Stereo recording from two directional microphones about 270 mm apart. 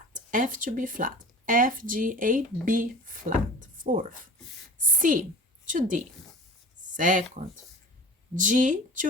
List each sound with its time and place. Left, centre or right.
0.1 s speech: right
8.4 s speech: right